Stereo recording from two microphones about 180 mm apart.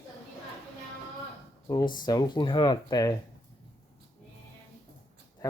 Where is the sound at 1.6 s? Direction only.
20° left (ahead or behind).